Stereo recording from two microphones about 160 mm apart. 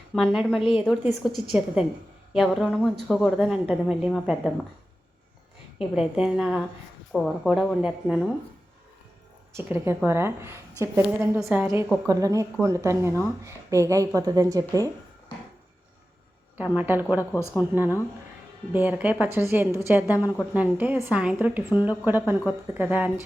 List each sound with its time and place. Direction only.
0.1 s speech: 5° right (ahead or behind)
5.8 s speech: 5° right (ahead or behind)
9.5 s a woman's voice: 15° right (ahead or behind)
11.3 s speech: centre (ahead or behind)
12.0 s a woman's voice: 20° right (ahead or behind)
16.7 s a woman's voice: 10° right (ahead or behind)
18.7 s a woman's voice: 10° right (ahead or behind)